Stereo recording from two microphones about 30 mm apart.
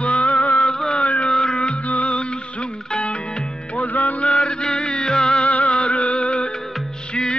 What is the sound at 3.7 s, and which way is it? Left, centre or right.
Music, left.